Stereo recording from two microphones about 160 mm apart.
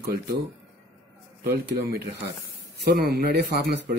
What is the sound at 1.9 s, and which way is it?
Speech, 80° right.